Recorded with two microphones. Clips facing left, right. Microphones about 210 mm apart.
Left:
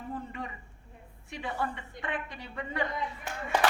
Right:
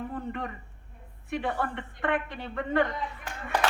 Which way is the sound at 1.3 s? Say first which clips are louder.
Right 5 dB; 60° right (ahead or behind).